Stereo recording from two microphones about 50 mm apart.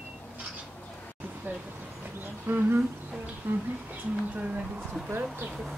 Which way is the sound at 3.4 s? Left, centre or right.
Right.